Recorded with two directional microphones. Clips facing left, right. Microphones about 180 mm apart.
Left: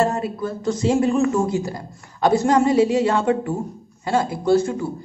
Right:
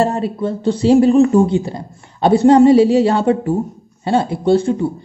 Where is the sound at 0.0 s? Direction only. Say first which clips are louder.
Right 4 dB; 30° right (ahead or behind).